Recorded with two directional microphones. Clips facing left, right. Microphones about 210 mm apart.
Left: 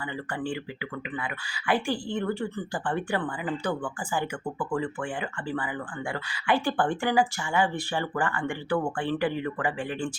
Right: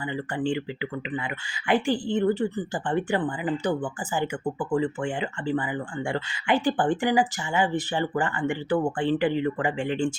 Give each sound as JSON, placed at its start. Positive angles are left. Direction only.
{"t": 0.1, "sound": "speech", "side_deg": -20}